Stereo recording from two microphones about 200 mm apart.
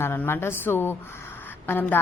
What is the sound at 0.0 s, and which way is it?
A woman's voice, 10° left (ahead or behind).